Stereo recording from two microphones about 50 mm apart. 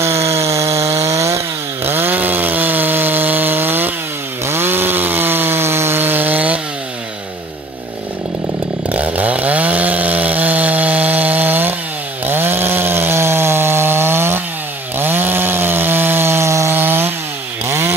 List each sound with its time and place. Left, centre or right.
0.0 s chainsaw: right
1.9 s chainsaw: right
8.8 s chainsaw: right
16.7 s chainsaw: right